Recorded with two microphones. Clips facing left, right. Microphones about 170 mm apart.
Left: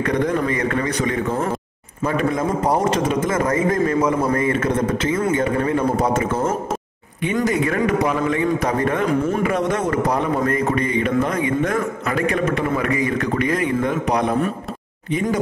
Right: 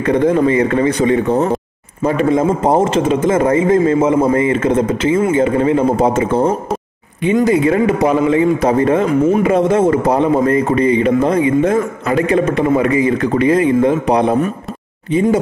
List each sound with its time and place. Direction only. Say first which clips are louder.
0.0 s a man's voice: right 7 dB; 25° right (ahead or behind)